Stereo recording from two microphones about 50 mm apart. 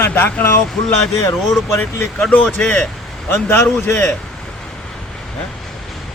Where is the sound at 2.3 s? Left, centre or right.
Left.